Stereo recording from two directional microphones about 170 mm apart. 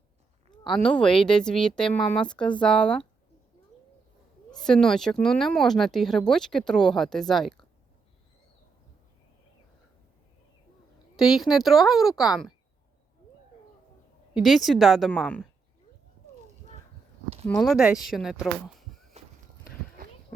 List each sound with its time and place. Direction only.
0.5 s a sound: 30° left (ahead or behind)
0.9 s speech: 5° left (ahead or behind)
4.5 s speech: 5° left (ahead or behind)
11.2 s speech: centre (ahead or behind)
14.3 s speech: centre (ahead or behind)
17.6 s speech: centre (ahead or behind)
19.2 s walk: 40° right (ahead or behind)
20.0 s clip-clop: 55° right (ahead or behind)